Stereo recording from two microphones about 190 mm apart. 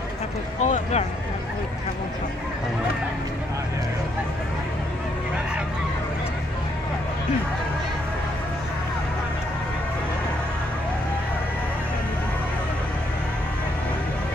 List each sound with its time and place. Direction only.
0.6 s speech: 35° left (ahead or behind)